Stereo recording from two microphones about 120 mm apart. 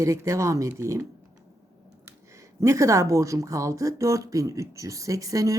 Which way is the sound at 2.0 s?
25° right (ahead or behind).